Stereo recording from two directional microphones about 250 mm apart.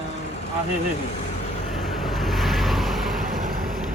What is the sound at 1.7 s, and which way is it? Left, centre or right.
Vehicle, centre.